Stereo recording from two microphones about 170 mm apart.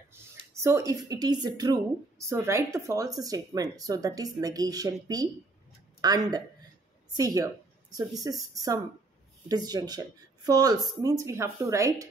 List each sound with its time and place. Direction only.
0.1 s speech: 15° right (ahead or behind)